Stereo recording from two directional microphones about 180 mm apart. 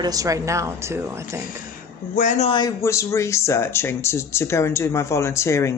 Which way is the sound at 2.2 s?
40° left (ahead or behind).